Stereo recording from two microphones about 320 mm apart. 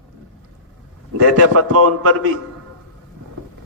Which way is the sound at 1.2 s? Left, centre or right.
Right.